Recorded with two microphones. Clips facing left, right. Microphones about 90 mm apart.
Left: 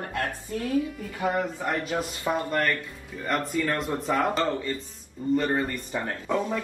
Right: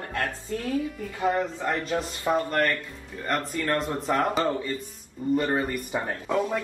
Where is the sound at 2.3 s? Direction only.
10° right (ahead or behind).